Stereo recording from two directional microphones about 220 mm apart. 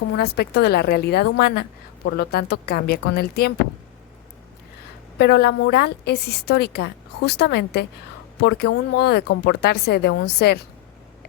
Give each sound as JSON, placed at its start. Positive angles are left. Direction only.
{"t": 0.2, "sound": "a woman's voice", "side_deg": 45}
{"t": 5.1, "sound": "a woman's voice", "side_deg": 50}